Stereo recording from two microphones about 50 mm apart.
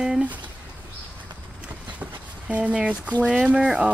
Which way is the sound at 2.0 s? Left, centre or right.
Right.